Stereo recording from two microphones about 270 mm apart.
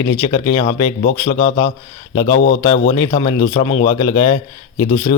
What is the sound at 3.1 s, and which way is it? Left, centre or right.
Speech, centre.